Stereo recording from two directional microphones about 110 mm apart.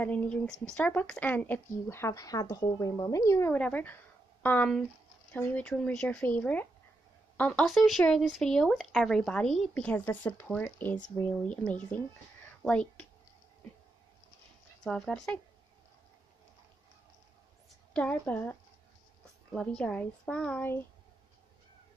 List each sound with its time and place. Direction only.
0.0 s speech: 10° left (ahead or behind)
3.5 s a woman's voice: 15° left (ahead or behind)
7.6 s speech: centre (ahead or behind)
14.9 s speech: 5° left (ahead or behind)
17.9 s speech: 10° left (ahead or behind)